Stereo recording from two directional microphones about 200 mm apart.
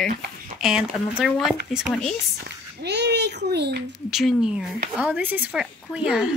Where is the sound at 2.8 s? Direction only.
55° right (ahead or behind).